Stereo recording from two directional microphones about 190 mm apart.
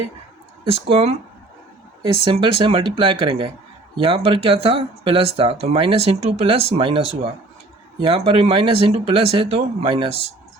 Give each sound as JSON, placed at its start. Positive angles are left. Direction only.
{"t": 0.6, "sound": "speech", "side_deg": -30}